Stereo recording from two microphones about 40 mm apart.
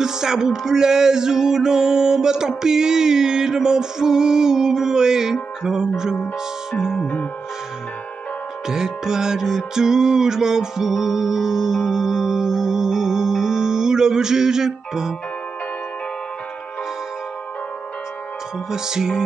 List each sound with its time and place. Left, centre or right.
0.0 s music: centre
8.6 s music: centre
18.7 s music: centre